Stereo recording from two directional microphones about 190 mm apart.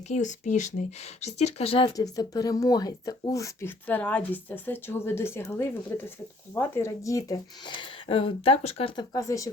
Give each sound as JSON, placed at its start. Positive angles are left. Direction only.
{"t": 0.1, "sound": "speech", "side_deg": 40}
{"t": 9.1, "sound": "speech", "side_deg": 15}